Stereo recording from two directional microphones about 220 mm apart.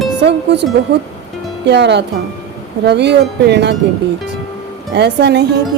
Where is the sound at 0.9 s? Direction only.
50° right (ahead or behind).